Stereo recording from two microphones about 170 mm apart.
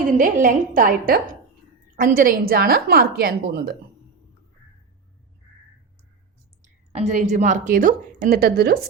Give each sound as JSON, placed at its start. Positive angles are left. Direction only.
{"t": 0.0, "sound": "a woman's voice", "side_deg": -50}
{"t": 6.9, "sound": "a woman's voice", "side_deg": -40}